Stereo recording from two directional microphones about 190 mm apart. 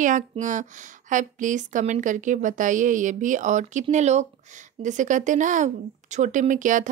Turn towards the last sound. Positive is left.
turn(degrees=-40)  # may be behind; listen again after turning